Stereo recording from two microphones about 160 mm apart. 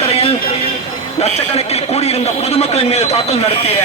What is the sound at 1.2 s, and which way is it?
A man's voice, 40° left (ahead or behind).